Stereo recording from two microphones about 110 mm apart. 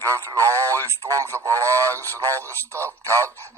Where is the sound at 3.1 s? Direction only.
30° right (ahead or behind).